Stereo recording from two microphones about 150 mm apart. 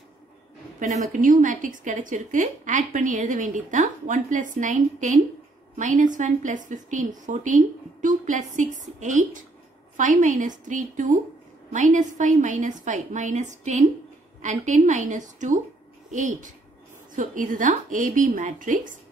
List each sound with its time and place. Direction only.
0.7 s a woman's voice: 55° right (ahead or behind)